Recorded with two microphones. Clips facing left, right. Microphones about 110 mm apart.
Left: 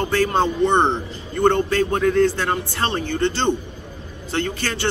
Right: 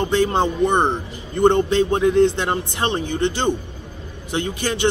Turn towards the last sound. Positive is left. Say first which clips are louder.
# right 1 dB
turn(degrees=-15)  # may be behind; listen again after turning